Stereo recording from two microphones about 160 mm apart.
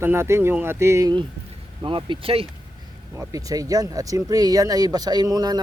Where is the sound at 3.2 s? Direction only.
20° right (ahead or behind).